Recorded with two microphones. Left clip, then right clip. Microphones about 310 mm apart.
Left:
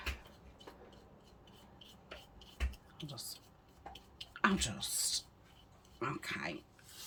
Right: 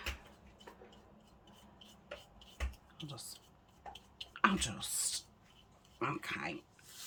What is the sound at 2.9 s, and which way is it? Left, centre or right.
Speech, centre.